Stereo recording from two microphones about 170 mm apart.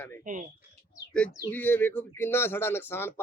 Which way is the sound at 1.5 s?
10° left (ahead or behind).